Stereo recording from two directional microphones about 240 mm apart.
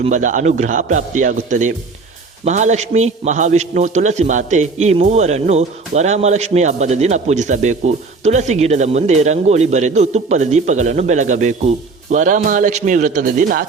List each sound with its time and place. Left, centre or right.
0.0 s a man's voice: right